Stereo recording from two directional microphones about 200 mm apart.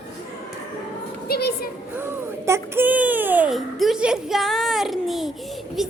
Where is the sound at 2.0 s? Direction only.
10° right (ahead or behind).